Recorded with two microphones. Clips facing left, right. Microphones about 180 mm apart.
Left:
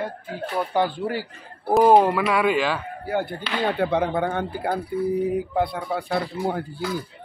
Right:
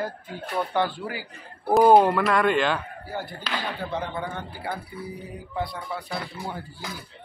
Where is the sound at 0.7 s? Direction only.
15° left (ahead or behind).